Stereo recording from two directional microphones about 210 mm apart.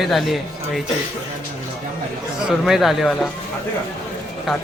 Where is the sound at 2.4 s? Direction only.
Centre (ahead or behind).